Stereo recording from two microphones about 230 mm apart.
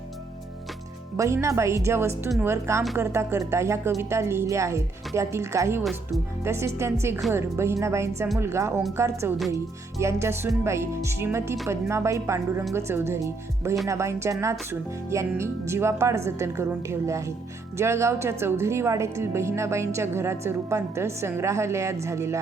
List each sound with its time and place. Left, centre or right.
1.1 s a woman's voice: centre